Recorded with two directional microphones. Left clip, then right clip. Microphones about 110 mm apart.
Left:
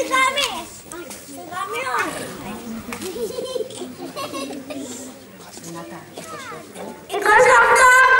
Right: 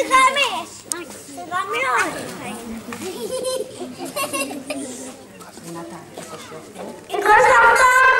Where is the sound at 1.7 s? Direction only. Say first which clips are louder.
Right 4 dB; 50° right (ahead or behind).